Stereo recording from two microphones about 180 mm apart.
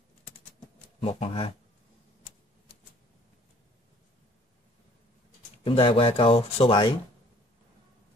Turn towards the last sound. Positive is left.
turn(degrees=30)  # may be behind; listen again after turning